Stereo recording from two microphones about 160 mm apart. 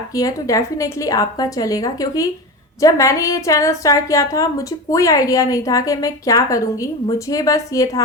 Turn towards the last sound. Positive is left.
turn(degrees=20)  # may be behind; listen again after turning